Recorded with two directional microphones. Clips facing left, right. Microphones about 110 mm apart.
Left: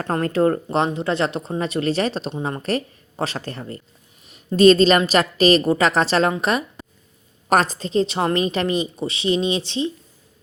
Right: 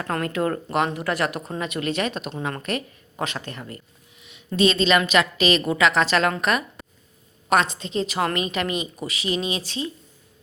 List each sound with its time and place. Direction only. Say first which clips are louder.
0.1 s a woman's voice: left 6 dB; 35° left (ahead or behind)